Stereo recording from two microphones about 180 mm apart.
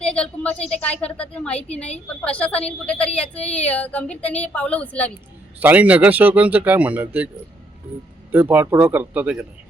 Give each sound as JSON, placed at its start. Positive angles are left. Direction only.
{"t": 0.0, "sound": "a woman's voice", "side_deg": 5}
{"t": 5.5, "sound": "a man's voice", "side_deg": -10}
{"t": 8.3, "sound": "a man's voice", "side_deg": -10}